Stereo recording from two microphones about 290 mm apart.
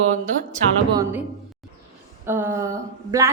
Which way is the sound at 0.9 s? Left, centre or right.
Centre.